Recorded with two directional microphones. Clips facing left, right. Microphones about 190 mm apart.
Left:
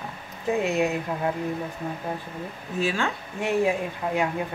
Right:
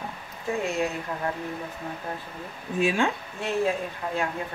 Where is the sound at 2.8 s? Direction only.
15° right (ahead or behind).